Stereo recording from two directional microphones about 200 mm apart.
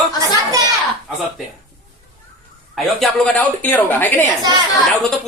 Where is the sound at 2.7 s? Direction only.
5° left (ahead or behind).